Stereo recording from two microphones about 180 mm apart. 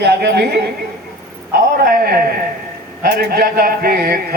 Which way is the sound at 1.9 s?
55° right (ahead or behind).